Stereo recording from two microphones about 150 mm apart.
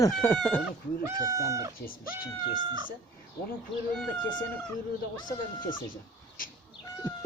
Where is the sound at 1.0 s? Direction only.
20° right (ahead or behind).